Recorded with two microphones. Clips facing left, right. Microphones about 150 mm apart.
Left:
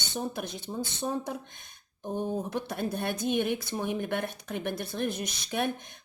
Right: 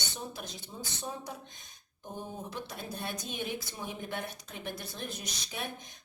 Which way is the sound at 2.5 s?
60° left (ahead or behind).